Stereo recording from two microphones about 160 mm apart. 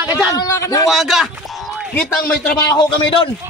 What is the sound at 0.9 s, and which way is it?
Speech, centre (ahead or behind).